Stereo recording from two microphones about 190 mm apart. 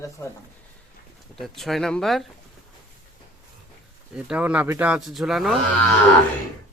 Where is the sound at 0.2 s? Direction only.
15° left (ahead or behind).